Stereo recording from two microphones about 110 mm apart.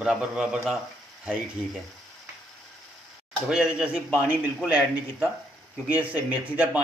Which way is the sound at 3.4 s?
5° right (ahead or behind).